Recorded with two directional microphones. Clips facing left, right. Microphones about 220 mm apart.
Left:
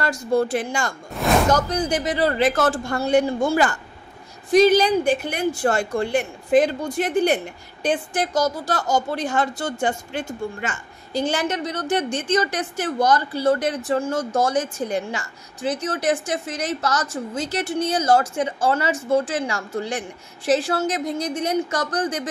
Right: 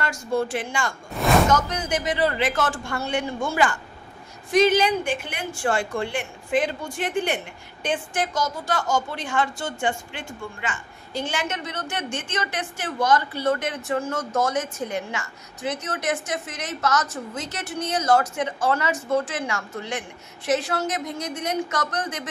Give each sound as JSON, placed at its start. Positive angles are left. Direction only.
{"t": 0.0, "sound": "speech", "side_deg": 35}